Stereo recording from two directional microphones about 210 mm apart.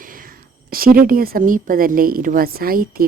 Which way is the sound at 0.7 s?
45° right (ahead or behind).